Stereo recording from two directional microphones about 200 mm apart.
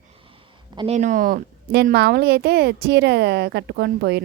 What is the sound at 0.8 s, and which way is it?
A woman's voice, 35° right (ahead or behind).